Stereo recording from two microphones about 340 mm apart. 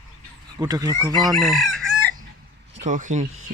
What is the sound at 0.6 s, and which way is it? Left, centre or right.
Speech, centre.